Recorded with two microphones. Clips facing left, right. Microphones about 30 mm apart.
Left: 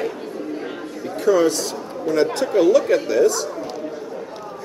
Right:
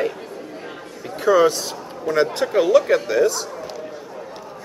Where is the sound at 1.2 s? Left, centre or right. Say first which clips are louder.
Right 1 dB; centre.